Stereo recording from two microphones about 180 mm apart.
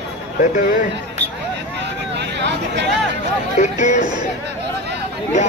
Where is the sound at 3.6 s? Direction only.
45° left (ahead or behind).